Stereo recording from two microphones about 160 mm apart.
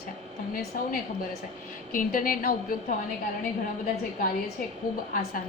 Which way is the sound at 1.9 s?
60° left (ahead or behind).